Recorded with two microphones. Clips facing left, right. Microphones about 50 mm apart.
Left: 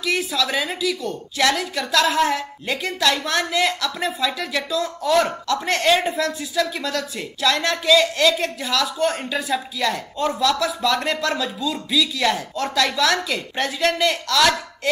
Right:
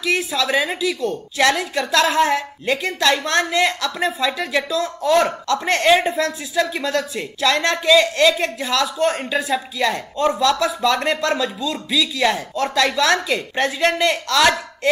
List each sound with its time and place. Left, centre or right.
0.0 s a woman's voice: centre
4.6 s a woman's voice: centre
12.4 s speech: centre
12.7 s a woman's voice: centre